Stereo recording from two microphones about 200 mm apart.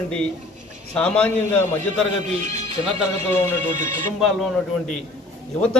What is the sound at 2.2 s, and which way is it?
Speech, 35° right (ahead or behind).